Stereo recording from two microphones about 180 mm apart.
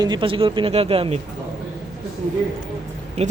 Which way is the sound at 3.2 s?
35° right (ahead or behind).